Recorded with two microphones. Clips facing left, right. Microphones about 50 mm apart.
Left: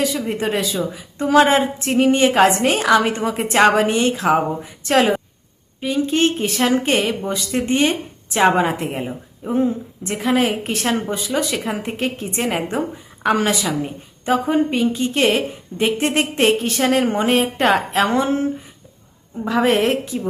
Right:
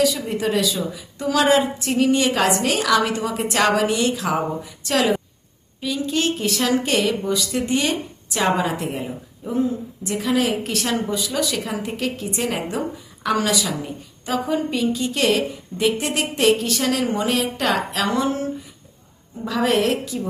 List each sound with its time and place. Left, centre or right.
0.0 s a woman's voice: left
19.5 s a woman's voice: left